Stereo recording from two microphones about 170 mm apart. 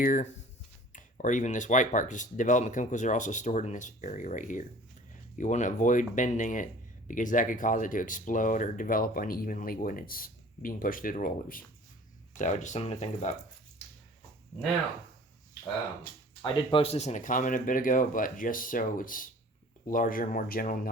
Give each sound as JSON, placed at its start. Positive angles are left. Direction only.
{"t": 0.0, "sound": "speech", "side_deg": 50}
{"t": 16.4, "sound": "speech", "side_deg": 35}